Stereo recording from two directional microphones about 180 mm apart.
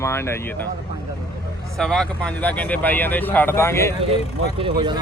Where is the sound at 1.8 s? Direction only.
5° left (ahead or behind).